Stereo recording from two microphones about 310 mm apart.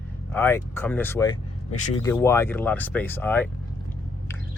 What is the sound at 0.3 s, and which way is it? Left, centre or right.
Speech, centre.